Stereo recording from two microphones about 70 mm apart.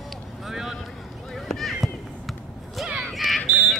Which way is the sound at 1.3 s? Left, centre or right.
Centre.